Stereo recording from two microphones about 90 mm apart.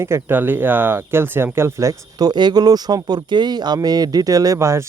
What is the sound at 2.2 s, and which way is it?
Speech, 50° right (ahead or behind).